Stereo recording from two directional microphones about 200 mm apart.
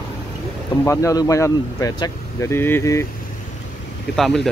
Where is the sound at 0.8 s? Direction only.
15° left (ahead or behind).